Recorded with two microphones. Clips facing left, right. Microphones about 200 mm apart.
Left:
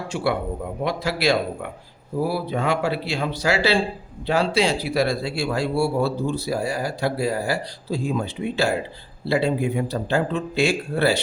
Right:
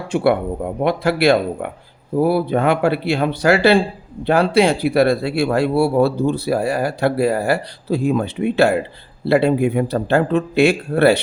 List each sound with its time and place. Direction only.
0.1 s speech: 55° right (ahead or behind)